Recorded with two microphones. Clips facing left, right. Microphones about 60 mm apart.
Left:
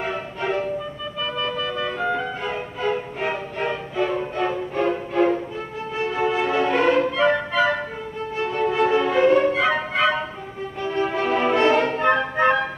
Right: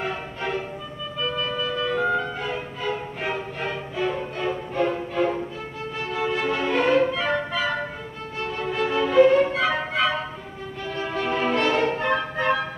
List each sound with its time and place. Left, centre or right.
1.8 s music: centre
3.2 s music: centre
4.5 s music: left
6.4 s music: centre
8.4 s music: left
9.1 s music: centre
11.2 s music: centre